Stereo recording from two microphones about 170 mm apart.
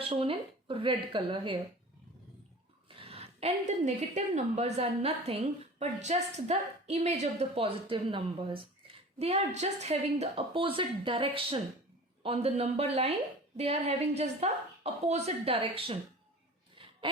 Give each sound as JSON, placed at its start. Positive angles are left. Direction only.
{"t": 0.1, "sound": "a woman's voice", "side_deg": -35}
{"t": 2.9, "sound": "a woman's voice", "side_deg": -35}